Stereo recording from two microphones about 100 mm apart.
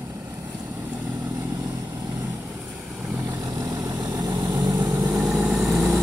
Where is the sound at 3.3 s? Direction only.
35° right (ahead or behind).